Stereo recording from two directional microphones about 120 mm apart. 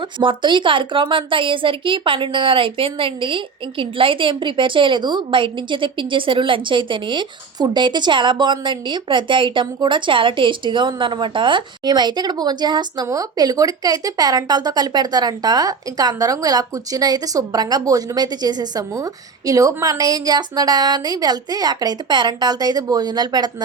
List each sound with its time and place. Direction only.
0.2 s a woman's voice: 40° right (ahead or behind)